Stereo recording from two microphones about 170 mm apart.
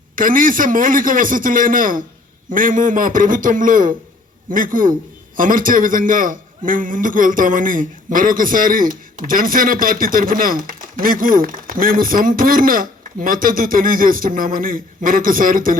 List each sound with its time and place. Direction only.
0.2 s a man's voice: 55° right (ahead or behind)